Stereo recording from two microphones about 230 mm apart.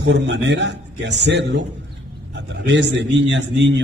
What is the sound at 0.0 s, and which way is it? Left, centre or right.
A man's voice, right.